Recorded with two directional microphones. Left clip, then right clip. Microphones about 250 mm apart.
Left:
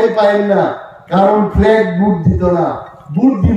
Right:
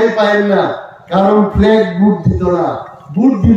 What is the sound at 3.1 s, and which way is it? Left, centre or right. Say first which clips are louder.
Speech: even; centre.